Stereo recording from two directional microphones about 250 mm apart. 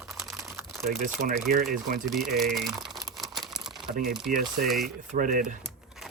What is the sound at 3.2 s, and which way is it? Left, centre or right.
Crumpling, centre.